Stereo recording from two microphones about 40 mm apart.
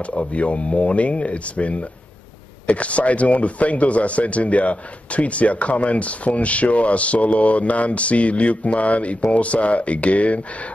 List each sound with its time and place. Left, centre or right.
0.0 s speech: left